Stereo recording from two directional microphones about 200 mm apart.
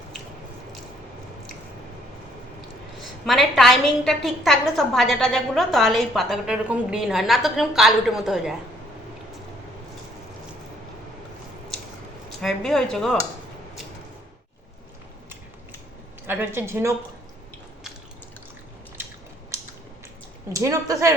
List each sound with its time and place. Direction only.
3.2 s a woman's voice: centre (ahead or behind)
12.4 s a woman's voice: centre (ahead or behind)
16.2 s a woman's voice: 10° right (ahead or behind)
20.5 s a woman's voice: 15° right (ahead or behind)